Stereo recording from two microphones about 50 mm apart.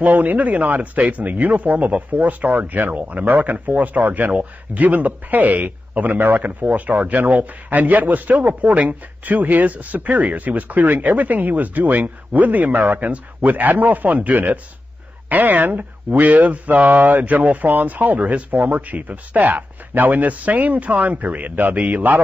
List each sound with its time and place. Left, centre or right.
0.0 s speech: right